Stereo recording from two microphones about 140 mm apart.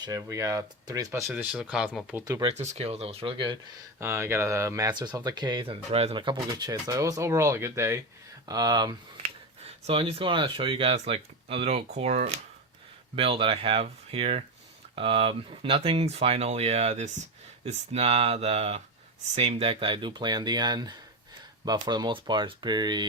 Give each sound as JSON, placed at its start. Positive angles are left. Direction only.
{"t": 0.0, "sound": "speech", "side_deg": -25}
{"t": 1.3, "sound": "speech", "side_deg": -10}
{"t": 2.2, "sound": "speech", "side_deg": -25}
{"t": 2.5, "sound": "speech", "side_deg": -50}
{"t": 4.0, "sound": "speech", "side_deg": -20}
{"t": 5.9, "sound": "speech", "side_deg": -45}
{"t": 8.4, "sound": "speech", "side_deg": -30}
{"t": 9.6, "sound": "speech", "side_deg": -45}